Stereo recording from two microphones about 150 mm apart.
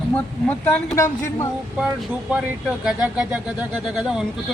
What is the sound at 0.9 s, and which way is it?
Speech, 20° left (ahead or behind).